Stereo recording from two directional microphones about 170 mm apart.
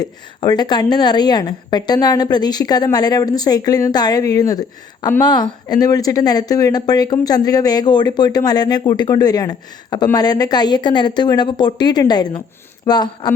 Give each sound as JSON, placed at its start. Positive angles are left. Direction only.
{"t": 0.0, "sound": "speech", "side_deg": 25}